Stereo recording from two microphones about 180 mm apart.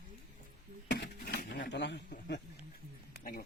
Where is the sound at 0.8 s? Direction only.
65° left (ahead or behind).